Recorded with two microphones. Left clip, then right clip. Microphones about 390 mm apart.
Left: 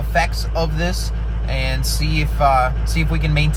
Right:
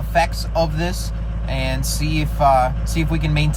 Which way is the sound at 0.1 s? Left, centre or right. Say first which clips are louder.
Right 1 dB; centre.